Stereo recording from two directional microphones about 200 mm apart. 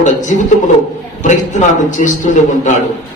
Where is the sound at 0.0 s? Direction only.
35° left (ahead or behind).